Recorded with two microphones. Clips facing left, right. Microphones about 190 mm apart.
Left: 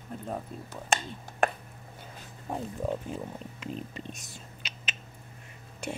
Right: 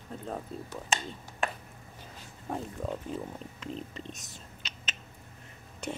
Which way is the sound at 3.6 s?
10° left (ahead or behind).